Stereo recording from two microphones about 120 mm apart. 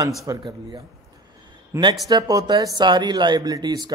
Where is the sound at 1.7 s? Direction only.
25° right (ahead or behind).